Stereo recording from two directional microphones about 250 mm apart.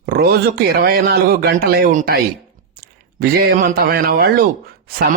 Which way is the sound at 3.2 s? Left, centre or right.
Right.